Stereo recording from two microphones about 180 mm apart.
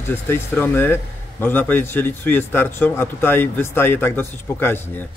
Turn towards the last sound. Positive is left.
turn(degrees=10)  # may be behind; listen again after turning